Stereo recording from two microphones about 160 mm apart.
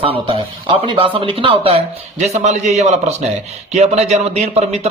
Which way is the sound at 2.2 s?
45° right (ahead or behind).